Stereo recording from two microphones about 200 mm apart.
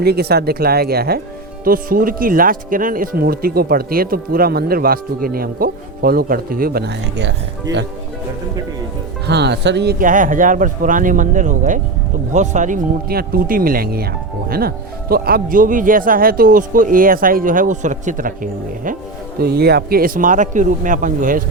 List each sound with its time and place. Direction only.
0.0 s speech: 55° right (ahead or behind)
9.2 s speech: 55° right (ahead or behind)
10.0 s speech: 40° right (ahead or behind)
15.1 s speech: 50° right (ahead or behind)
19.4 s speech: 50° right (ahead or behind)